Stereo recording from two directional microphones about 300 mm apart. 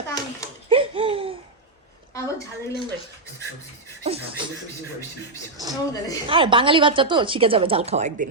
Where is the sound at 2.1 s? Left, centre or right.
Centre.